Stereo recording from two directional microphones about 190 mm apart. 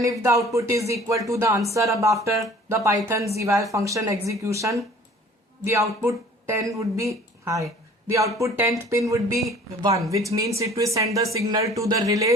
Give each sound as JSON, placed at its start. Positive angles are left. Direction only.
{"t": 0.0, "sound": "a woman's voice", "side_deg": -15}